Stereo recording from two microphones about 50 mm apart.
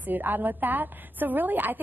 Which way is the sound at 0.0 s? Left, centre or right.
Right.